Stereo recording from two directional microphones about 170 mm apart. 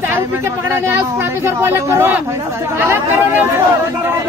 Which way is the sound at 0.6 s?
15° right (ahead or behind).